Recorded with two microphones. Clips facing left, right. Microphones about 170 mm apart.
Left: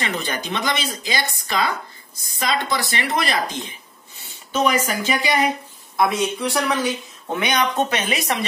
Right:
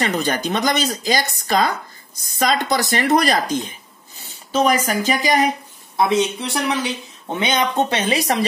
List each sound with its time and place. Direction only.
0.0 s a woman's voice: 40° right (ahead or behind)
5.9 s speech: 25° right (ahead or behind)